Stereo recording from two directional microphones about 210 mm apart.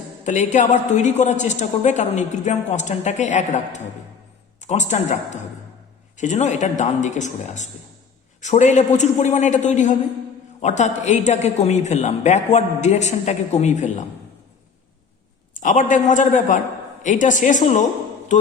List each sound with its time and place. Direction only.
0.3 s a woman's voice: 35° left (ahead or behind)
15.6 s a woman's voice: 35° left (ahead or behind)